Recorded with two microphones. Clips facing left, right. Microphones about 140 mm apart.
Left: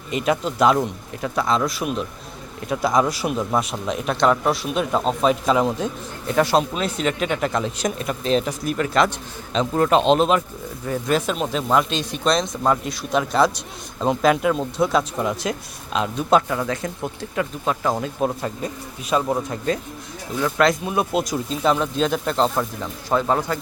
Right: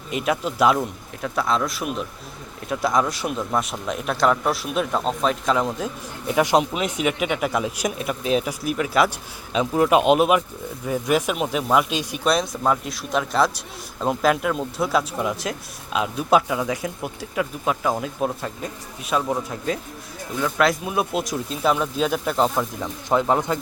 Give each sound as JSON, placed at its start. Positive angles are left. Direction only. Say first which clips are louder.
{"t": 0.1, "sound": "speech", "louder": "left 2 dB", "side_deg": -5}
{"t": 6.2, "sound": "speech", "louder": "even", "side_deg": -15}